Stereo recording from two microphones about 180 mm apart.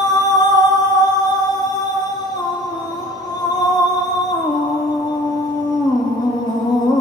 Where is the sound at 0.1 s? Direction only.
20° left (ahead or behind).